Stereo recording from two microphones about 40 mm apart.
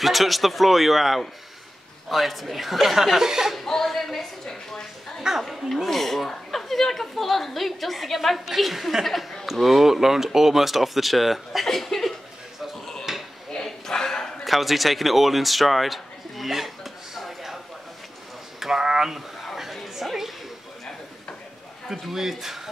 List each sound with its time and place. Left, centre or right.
0.0 s a woman's voice: centre
3.5 s speech: centre
5.5 s a woman's voice: centre
13.1 s dishes: centre
13.6 s a sound: centre
14.4 s a sound: centre
18.6 s speech: centre
19.5 s a sound: centre
21.8 s a man's voice: centre